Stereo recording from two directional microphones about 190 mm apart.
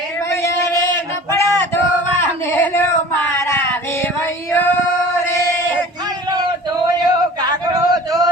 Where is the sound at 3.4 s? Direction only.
15° left (ahead or behind).